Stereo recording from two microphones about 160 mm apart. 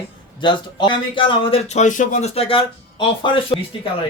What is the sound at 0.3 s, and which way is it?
A man's voice, 30° left (ahead or behind).